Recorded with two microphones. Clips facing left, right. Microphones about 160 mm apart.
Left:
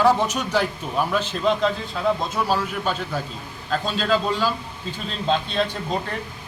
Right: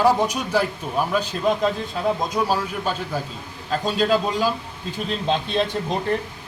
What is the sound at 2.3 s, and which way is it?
A man's voice, 10° right (ahead or behind).